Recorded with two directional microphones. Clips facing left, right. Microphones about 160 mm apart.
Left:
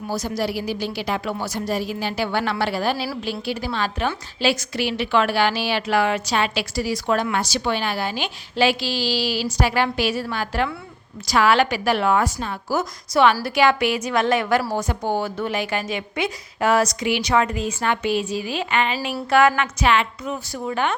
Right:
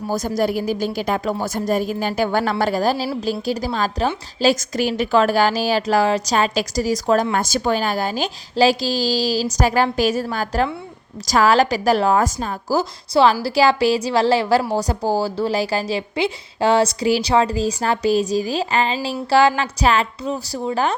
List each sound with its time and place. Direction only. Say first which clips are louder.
0.1 s a woman's voice: right 4 dB; 45° right (ahead or behind)